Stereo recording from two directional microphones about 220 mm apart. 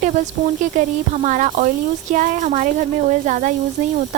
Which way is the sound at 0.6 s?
35° right (ahead or behind).